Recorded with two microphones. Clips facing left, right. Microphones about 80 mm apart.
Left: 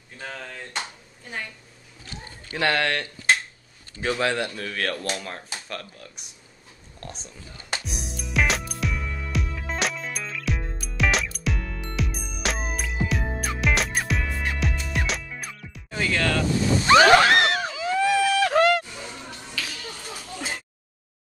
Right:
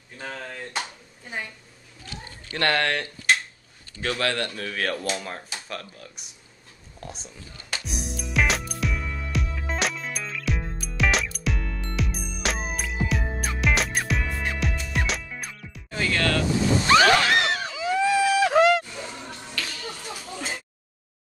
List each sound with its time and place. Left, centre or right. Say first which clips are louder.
0.2 s speech: right 1 dB; centre
2.5 s speech: even; centre
4.0 s a man's voice: left 2 dB; centre
4.6 s speech: even; centre
7.8 s music: right 2 dB; centre
16.8 s a sound: left 3 dB; centre
17.3 s a sound: left 3 dB; left
17.6 s vehicle: even; centre
18.9 s finger snapping: right 1 dB; centre